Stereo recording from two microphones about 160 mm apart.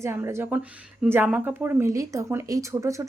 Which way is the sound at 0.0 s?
15° right (ahead or behind).